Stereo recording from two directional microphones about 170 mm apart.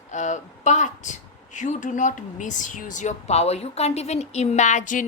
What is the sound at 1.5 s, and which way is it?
Speech, 45° left (ahead or behind).